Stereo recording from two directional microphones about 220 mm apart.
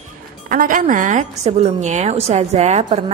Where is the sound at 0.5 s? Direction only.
40° right (ahead or behind).